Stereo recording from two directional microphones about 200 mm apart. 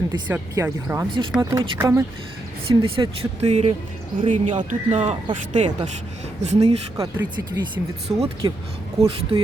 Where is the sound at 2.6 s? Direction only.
25° right (ahead or behind).